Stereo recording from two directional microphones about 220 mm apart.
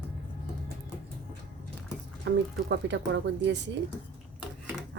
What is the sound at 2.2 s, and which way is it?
A woman's voice, 55° right (ahead or behind).